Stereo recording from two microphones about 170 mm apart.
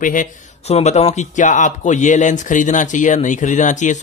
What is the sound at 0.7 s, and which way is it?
Speech, 40° left (ahead or behind).